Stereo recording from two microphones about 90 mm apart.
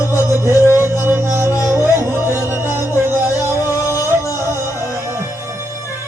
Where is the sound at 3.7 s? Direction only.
40° left (ahead or behind).